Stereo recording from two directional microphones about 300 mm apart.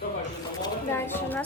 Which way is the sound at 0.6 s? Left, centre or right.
Centre.